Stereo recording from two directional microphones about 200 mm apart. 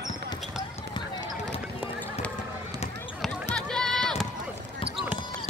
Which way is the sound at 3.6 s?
Centre (ahead or behind).